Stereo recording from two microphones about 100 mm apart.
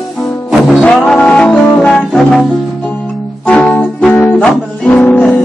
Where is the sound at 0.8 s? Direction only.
10° left (ahead or behind).